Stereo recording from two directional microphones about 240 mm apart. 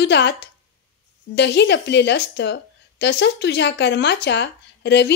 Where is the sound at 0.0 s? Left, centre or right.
Left.